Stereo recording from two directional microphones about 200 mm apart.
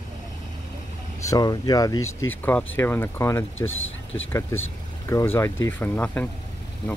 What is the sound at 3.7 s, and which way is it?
Speech, 80° left.